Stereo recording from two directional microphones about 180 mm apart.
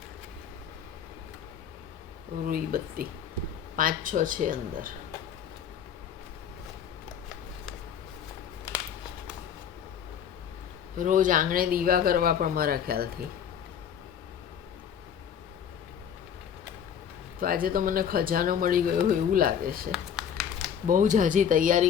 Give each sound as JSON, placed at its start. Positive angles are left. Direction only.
{"t": 2.5, "sound": "speech", "side_deg": -55}
{"t": 10.9, "sound": "speech", "side_deg": -45}
{"t": 17.4, "sound": "speech", "side_deg": -55}
{"t": 19.9, "sound": "a sound", "side_deg": -5}
{"t": 20.8, "sound": "speech", "side_deg": -45}